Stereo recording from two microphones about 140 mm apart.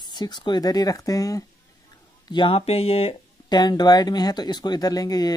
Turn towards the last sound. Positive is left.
turn(degrees=25)  # may be behind; listen again after turning